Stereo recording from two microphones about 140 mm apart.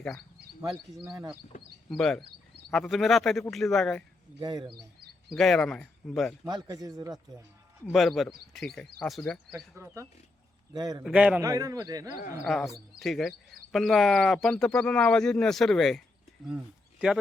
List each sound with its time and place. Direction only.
0.7 s speech: centre (ahead or behind)
4.4 s speech: 30° right (ahead or behind)
5.3 s speech: centre (ahead or behind)
6.5 s a man's voice: 25° right (ahead or behind)
7.9 s speech: centre (ahead or behind)
9.5 s a man's voice: 20° right (ahead or behind)
11.0 s a man's voice: 10° right (ahead or behind)
11.4 s a man's voice: 25° right (ahead or behind)
12.5 s speech: centre (ahead or behind)